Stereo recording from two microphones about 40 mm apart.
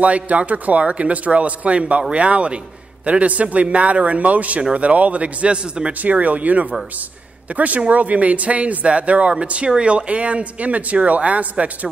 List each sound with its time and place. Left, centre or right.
0.0 s speech: right
6.0 s speech: right